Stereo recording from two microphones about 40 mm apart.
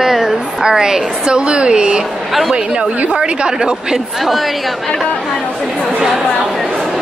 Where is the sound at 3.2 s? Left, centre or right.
Centre.